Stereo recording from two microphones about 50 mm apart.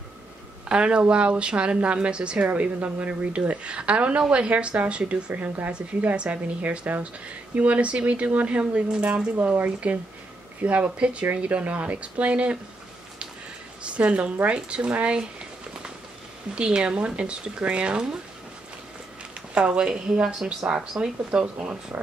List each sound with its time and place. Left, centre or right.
0.7 s speech: centre
6.1 s speech: right
13.8 s speech: right
16.5 s speech: right
19.5 s speech: right